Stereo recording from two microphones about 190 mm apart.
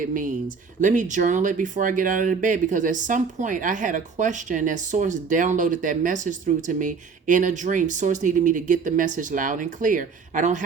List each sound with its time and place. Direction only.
0.0 s speech: 45° right (ahead or behind)